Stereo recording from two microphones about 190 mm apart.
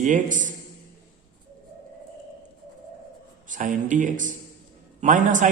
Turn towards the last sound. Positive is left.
turn(degrees=-40)  # may be behind; listen again after turning